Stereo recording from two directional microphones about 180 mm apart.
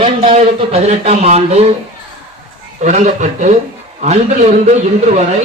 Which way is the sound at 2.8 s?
40° right (ahead or behind).